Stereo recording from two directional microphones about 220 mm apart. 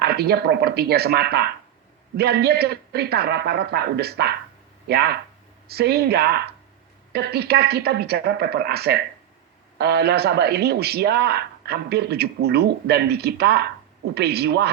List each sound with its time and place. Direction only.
0.0 s a man's voice: 45° right (ahead or behind)